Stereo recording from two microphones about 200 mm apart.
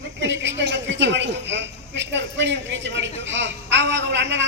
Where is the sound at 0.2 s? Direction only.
65° right (ahead or behind).